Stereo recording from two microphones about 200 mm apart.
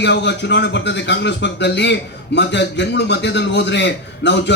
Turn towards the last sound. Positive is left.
turn(degrees=60)  # may be behind; listen again after turning